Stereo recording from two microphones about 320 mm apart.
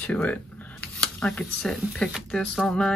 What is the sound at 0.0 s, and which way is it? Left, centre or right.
Speech, centre.